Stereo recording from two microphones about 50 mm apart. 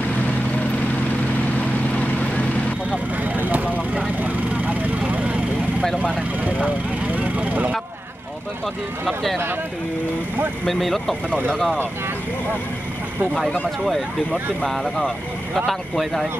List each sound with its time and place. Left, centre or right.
3.3 s vehicle: right
7.2 s vehicle: right
9.0 s speech: centre
10.6 s speech: centre
11.2 s speech: right
11.5 s speech: centre
14.6 s speech: centre